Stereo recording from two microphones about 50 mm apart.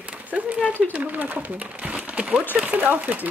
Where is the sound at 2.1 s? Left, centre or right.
Right.